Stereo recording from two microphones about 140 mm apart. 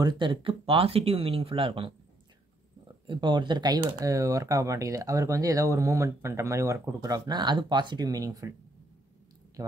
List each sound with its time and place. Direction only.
0.0 s speech: 35° right (ahead or behind)
3.1 s speech: 35° right (ahead or behind)
9.6 s speech: 25° right (ahead or behind)